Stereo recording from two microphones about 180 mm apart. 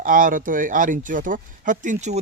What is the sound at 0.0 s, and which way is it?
Speech, 50° right (ahead or behind).